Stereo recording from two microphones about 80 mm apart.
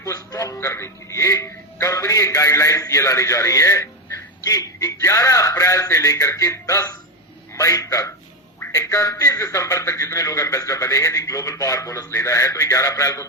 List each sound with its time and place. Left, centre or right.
0.0 s a man's voice: left